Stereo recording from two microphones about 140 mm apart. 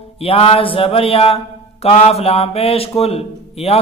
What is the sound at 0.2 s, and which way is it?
Mantra, 45° left (ahead or behind).